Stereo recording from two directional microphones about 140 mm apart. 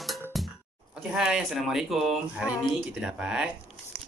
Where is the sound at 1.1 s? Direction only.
5° right (ahead or behind).